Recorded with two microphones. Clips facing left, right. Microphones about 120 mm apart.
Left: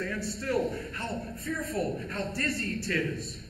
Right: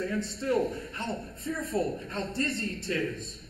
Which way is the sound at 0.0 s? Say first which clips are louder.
Right 2 dB; 20° right (ahead or behind).